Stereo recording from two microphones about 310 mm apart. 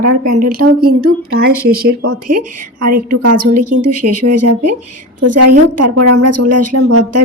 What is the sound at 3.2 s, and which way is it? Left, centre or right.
A woman's voice, right.